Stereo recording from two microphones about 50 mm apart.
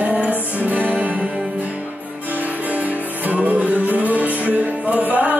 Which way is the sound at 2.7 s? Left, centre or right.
Right.